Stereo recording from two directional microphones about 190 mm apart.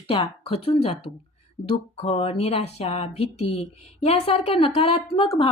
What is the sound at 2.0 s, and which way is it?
Speech, 30° left (ahead or behind).